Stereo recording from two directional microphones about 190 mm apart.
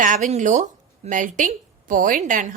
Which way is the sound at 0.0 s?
40° right (ahead or behind).